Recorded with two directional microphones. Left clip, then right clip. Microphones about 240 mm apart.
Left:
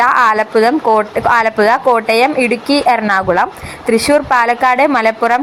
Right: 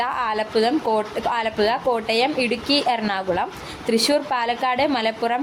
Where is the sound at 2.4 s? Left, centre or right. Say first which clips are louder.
Left 8 dB; left.